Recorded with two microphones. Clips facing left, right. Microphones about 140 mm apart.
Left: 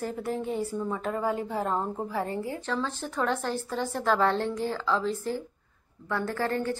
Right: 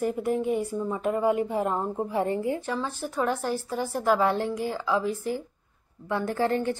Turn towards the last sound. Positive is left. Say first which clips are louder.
# right 3 dB
turn(degrees=-20)  # may be behind; listen again after turning